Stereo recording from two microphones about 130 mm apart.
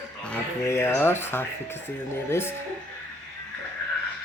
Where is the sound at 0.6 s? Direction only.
20° left (ahead or behind).